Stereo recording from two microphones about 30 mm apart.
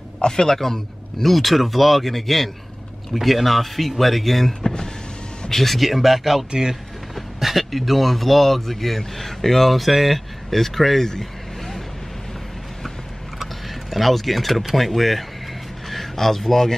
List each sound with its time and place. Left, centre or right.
0.5 s a man's voice: centre
6.5 s speech: right
7.2 s speech: centre
11.1 s vehicle: centre
13.4 s vehicle: centre
14.8 s speech: centre